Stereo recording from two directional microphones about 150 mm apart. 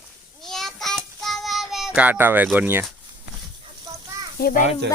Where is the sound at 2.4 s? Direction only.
10° right (ahead or behind).